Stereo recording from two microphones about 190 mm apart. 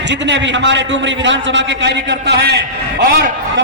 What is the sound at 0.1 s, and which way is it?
A man's voice, 70° right (ahead or behind).